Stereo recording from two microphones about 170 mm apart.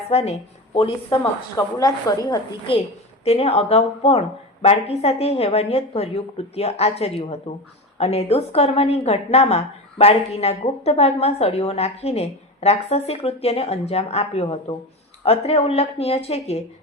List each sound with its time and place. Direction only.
0.1 s a woman's voice: 40° left (ahead or behind)
1.2 s speech: 20° left (ahead or behind)
3.2 s a woman's voice: 35° left (ahead or behind)